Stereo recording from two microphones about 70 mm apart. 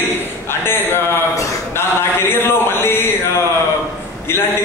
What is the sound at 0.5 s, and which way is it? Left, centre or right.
Speech, left.